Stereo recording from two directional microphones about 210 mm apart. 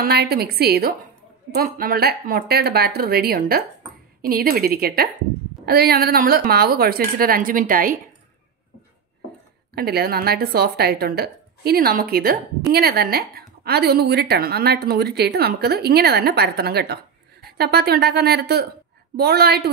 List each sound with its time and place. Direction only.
0.0 s a woman's voice: 50° right (ahead or behind)
9.8 s a woman's voice: 45° right (ahead or behind)